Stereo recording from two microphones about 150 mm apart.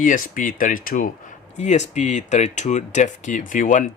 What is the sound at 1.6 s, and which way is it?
Speech, 50° left (ahead or behind).